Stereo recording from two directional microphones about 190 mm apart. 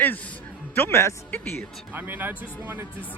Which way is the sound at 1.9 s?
10° right (ahead or behind).